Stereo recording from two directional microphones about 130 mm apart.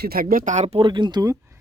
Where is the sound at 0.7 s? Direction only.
35° right (ahead or behind).